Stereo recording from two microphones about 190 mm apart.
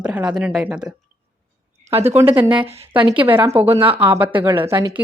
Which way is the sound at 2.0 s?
10° right (ahead or behind).